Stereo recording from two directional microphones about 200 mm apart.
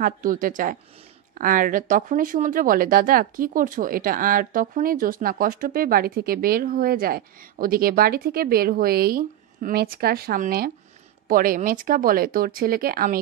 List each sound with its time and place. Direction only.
0.0 s speech: 45° right (ahead or behind)